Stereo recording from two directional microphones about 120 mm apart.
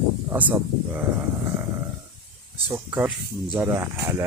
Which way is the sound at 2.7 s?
15° right (ahead or behind).